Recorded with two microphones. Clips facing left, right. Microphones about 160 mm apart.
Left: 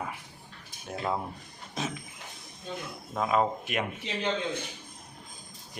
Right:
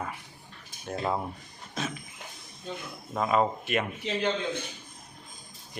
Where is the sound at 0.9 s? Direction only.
5° left (ahead or behind).